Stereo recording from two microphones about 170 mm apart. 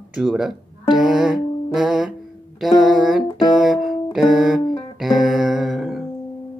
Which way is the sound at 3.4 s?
Centre (ahead or behind).